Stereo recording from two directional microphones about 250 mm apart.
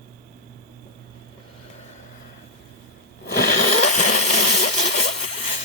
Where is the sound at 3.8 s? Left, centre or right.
Left.